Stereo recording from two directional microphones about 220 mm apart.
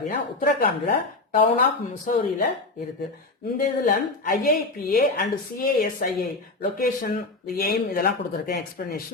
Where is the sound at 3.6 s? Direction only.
40° left (ahead or behind).